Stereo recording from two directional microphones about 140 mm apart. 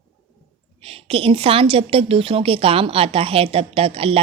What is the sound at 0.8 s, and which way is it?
A woman's voice, 45° right (ahead or behind).